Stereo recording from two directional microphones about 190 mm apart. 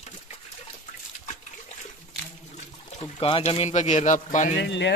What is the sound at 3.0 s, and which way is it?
Speech, 30° left (ahead or behind).